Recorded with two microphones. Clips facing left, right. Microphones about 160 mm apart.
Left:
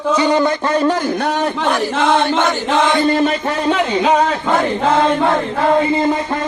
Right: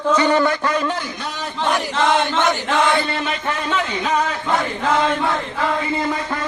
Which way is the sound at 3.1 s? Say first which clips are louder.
Left 10 dB; 40° left (ahead or behind).